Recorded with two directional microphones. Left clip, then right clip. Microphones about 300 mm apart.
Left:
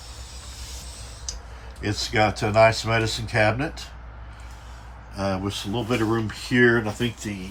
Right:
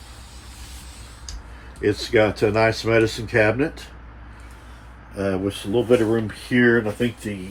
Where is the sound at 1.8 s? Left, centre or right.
Centre.